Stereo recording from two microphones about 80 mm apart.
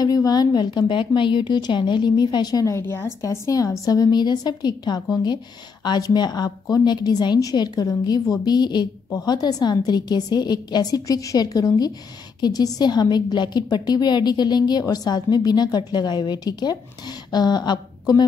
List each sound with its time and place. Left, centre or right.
0.0 s a woman's voice: left
2.8 s a woman's voice: left
3.2 s a woman's voice: left